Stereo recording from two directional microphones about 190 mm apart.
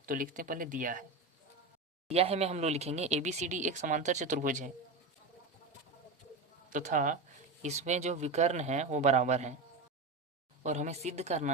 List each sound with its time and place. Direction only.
0.0 s speech: 45° right (ahead or behind)
2.0 s speech: 35° right (ahead or behind)
6.7 s speech: 40° right (ahead or behind)
10.6 s speech: 40° right (ahead or behind)